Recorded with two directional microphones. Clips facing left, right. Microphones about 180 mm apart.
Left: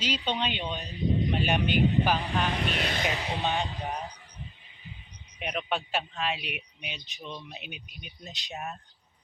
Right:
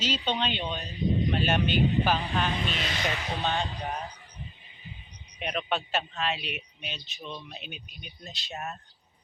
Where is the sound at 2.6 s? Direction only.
60° left (ahead or behind).